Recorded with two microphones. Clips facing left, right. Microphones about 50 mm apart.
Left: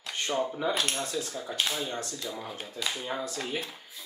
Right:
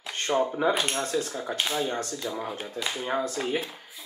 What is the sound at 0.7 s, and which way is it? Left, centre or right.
Speech, centre.